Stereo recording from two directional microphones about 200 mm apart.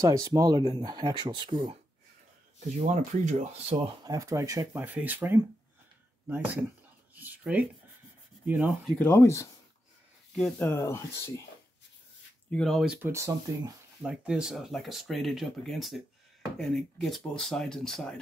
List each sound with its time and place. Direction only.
0.0 s speech: 15° right (ahead or behind)
2.8 s speech: 35° right (ahead or behind); by 8.9 s 5° right (ahead or behind)
8.9 s speech: 10° left (ahead or behind)
10.3 s speech: 5° left (ahead or behind)
10.7 s speech: 15° left (ahead or behind)
12.4 s speech: 5° left (ahead or behind)
13.0 s speech: 15° right (ahead or behind)
14.0 s speech: 5° right (ahead or behind)